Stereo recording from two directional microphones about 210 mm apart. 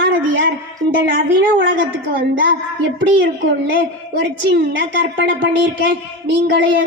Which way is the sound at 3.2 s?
60° right (ahead or behind).